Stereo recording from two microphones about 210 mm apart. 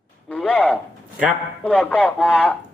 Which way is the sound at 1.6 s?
5° left (ahead or behind).